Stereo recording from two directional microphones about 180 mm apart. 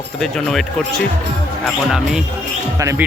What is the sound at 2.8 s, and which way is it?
Speech, 15° right (ahead or behind).